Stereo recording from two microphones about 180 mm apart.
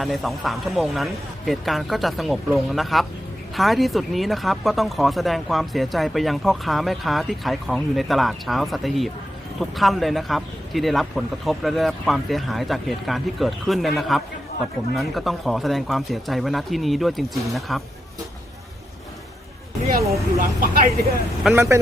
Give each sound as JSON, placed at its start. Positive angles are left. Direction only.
{"t": 0.0, "sound": "speech", "side_deg": 0}
{"t": 20.4, "sound": "speech", "side_deg": -50}
{"t": 21.5, "sound": "speech", "side_deg": -15}